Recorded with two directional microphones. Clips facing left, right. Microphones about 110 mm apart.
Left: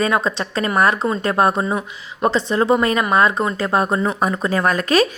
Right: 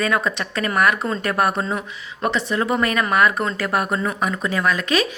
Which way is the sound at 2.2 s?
30° left (ahead or behind).